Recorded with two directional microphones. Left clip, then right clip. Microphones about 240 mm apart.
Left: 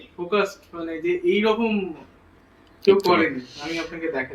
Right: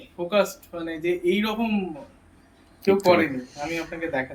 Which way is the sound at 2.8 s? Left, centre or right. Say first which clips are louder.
Left 2 dB; right.